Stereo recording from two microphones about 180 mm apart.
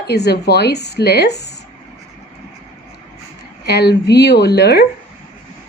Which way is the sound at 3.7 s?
65° left (ahead or behind).